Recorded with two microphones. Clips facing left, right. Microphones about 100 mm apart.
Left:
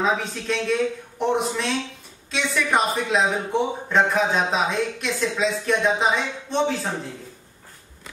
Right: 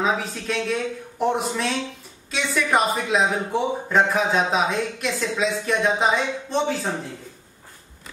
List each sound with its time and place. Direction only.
0.0 s speech: centre (ahead or behind)